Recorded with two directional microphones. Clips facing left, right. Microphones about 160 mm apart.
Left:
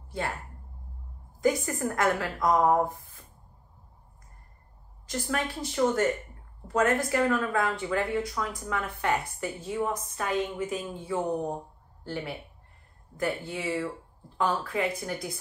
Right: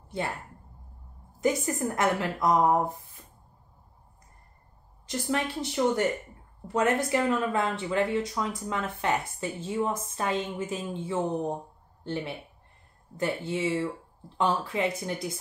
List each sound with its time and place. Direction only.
1.4 s a woman's voice: 25° right (ahead or behind)
5.3 s a woman's voice: 20° right (ahead or behind)